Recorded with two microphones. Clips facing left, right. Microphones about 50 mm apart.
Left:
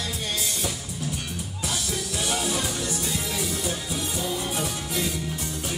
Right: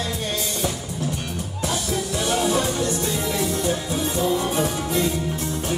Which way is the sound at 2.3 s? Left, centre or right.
Centre.